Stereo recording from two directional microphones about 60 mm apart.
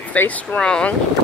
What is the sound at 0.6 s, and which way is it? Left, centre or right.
Speech, centre.